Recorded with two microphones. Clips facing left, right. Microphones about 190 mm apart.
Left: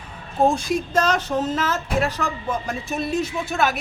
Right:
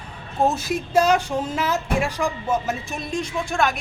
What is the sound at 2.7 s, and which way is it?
Speech, centre (ahead or behind).